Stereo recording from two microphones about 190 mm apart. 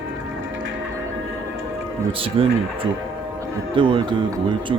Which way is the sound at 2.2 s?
30° right (ahead or behind).